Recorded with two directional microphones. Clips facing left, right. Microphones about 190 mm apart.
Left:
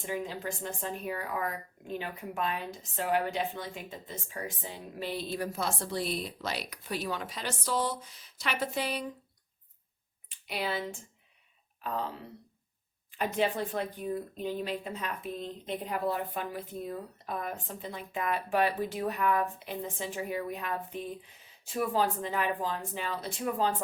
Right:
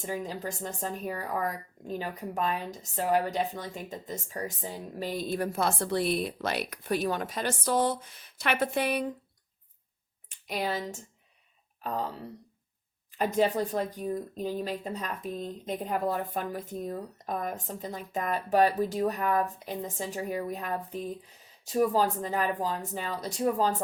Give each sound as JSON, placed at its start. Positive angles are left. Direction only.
{"t": 0.0, "sound": "speech", "side_deg": -40}
{"t": 10.2, "sound": "a sound", "side_deg": -45}
{"t": 13.1, "sound": "speech", "side_deg": -40}